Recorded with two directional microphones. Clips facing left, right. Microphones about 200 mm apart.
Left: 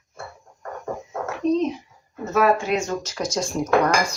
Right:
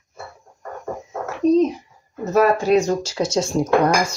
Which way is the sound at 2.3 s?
40° right (ahead or behind).